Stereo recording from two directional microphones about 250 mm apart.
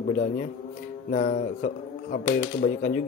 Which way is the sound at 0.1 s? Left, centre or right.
Left.